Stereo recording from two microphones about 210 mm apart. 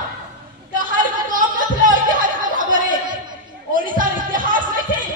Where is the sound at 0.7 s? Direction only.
40° right (ahead or behind).